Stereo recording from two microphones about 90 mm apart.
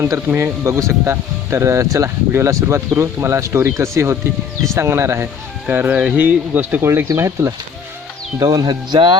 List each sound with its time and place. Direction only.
0.3 s speech: 30° right (ahead or behind)
5.6 s speech: 15° right (ahead or behind)
7.2 s speech: 35° right (ahead or behind)
8.4 s speech: 45° right (ahead or behind)